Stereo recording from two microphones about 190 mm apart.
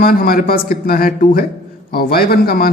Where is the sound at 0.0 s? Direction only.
50° left (ahead or behind).